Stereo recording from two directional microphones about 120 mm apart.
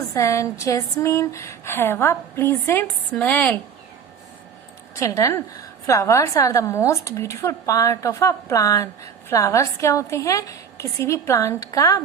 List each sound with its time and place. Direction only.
0.1 s a woman's voice: 25° left (ahead or behind)
4.9 s a woman's voice: 25° left (ahead or behind)